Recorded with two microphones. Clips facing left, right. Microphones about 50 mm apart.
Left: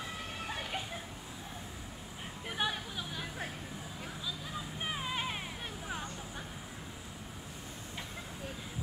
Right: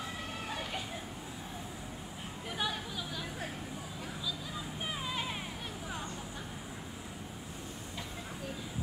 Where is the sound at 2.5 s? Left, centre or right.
Left.